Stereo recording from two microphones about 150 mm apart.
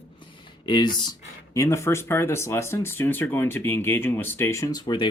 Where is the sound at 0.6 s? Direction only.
30° left (ahead or behind).